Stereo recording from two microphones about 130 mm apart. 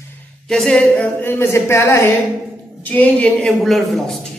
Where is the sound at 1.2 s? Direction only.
15° left (ahead or behind).